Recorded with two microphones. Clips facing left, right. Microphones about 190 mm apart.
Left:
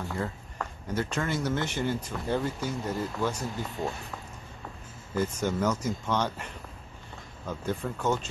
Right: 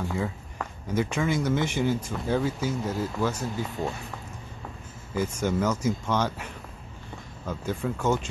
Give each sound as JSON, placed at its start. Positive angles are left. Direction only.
{"t": 0.0, "sound": "speech", "side_deg": 0}
{"t": 0.8, "sound": "speech", "side_deg": -10}
{"t": 5.1, "sound": "speech", "side_deg": -5}